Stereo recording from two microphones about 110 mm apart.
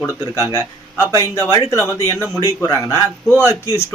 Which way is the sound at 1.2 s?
25° left (ahead or behind).